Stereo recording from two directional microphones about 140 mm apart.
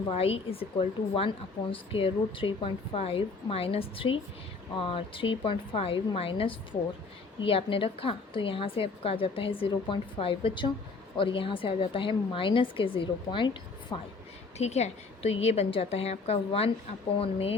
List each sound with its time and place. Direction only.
0.1 s a woman's voice: 45° left (ahead or behind)
14.6 s a woman's voice: 50° left (ahead or behind)